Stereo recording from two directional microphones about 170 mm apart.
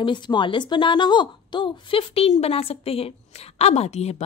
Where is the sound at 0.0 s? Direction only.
25° left (ahead or behind).